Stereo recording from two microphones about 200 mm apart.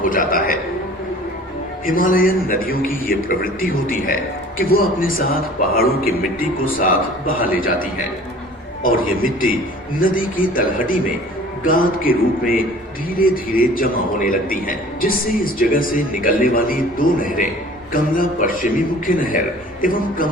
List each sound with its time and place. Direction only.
0.0 s a man's voice: 45° left (ahead or behind)
1.9 s a man's voice: 45° left (ahead or behind)
7.3 s a man's voice: 45° left (ahead or behind)
8.8 s a man's voice: 45° left (ahead or behind)